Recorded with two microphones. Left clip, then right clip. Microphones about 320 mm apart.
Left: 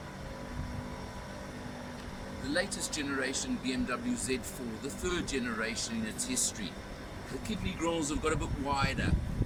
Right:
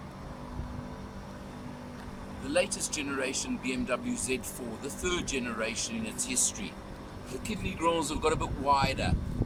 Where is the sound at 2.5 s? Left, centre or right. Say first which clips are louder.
Right 5 dB; centre.